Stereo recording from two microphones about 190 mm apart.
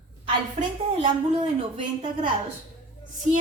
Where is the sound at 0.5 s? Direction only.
30° right (ahead or behind).